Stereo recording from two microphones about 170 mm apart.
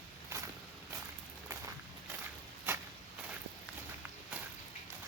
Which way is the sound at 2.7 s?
10° right (ahead or behind).